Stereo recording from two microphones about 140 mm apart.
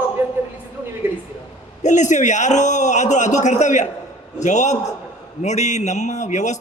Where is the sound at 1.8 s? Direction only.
60° left (ahead or behind).